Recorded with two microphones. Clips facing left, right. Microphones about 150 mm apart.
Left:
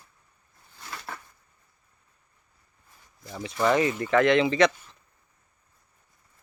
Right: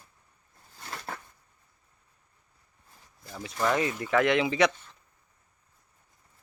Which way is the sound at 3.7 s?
Centre (ahead or behind).